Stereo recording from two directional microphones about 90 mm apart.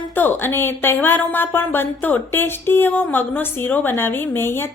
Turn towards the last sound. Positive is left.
turn(degrees=25)  # may be behind; listen again after turning